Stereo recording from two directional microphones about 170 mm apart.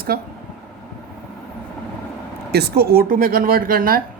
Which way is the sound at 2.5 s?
70° right (ahead or behind).